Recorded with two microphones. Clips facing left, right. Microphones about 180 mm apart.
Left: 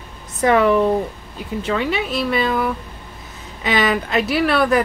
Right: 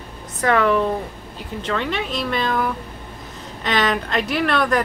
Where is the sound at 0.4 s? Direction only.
15° left (ahead or behind).